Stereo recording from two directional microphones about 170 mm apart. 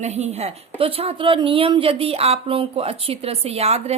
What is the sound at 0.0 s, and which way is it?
Speech, 40° right (ahead or behind).